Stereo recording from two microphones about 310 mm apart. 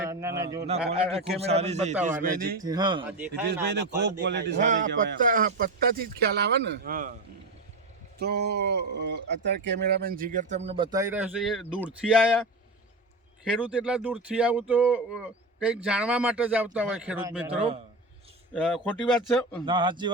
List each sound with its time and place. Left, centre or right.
0.0 s a man's voice: centre; by 2.6 s right
2.6 s a man's voice: centre
3.4 s a man's voice: right
8.2 s speech: right; by 12.4 s centre
13.4 s speech: centre
19.6 s a man's voice: centre